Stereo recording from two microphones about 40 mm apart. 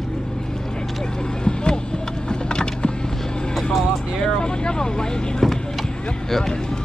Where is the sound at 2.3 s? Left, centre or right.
Left.